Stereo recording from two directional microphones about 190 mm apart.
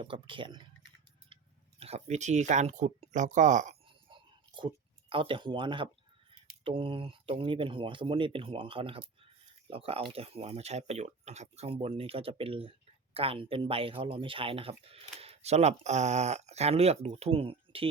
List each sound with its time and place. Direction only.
0.0 s speech: 25° right (ahead or behind)
1.3 s chewing: 25° right (ahead or behind)
1.8 s speech: 35° right (ahead or behind)
3.8 s a sound: 25° right (ahead or behind)
6.7 s speech: 30° right (ahead or behind)